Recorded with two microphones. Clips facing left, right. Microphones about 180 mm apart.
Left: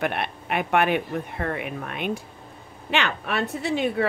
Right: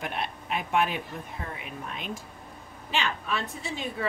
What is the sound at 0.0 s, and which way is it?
A woman's voice, 65° left (ahead or behind).